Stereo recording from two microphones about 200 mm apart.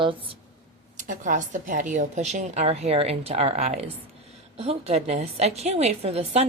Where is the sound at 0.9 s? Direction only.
40° right (ahead or behind).